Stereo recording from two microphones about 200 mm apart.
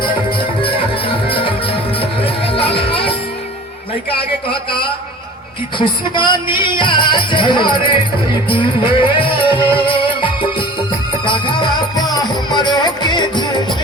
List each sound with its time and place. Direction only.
0.6 s music: 25° left (ahead or behind)
5.8 s music: 25° left (ahead or behind)